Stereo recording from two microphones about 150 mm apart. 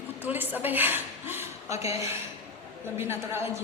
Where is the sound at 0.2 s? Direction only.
10° right (ahead or behind).